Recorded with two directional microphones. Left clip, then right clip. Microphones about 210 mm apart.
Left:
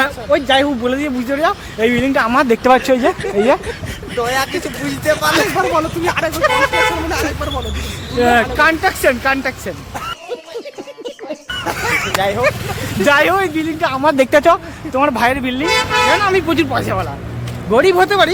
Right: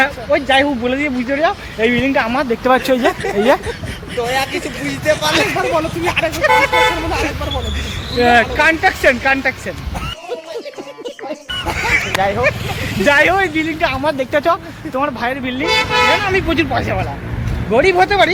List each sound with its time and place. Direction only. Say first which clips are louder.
0.0 s speech: even; 15° left (ahead or behind)
2.3 s speech: left 4 dB; 45° left (ahead or behind)
2.6 s speech: right 2 dB; 15° left (ahead or behind)
4.2 s speech: left 1 dB; 35° left (ahead or behind)
6.5 s speech: right 5 dB; 30° right (ahead or behind)
8.2 s speech: even; 5° left (ahead or behind)
11.6 s a sound: even; 10° left (ahead or behind)
12.2 s speech: even; 15° left (ahead or behind)
14.0 s speech: left 5 dB; 40° left (ahead or behind)
15.1 s speech: left 5 dB; 45° left (ahead or behind)
15.7 s speech: even; 50° left (ahead or behind)
16.2 s speech: left 2 dB; 15° left (ahead or behind)